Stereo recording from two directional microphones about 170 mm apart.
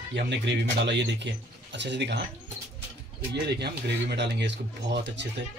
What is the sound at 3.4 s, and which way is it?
Speech, 80° right.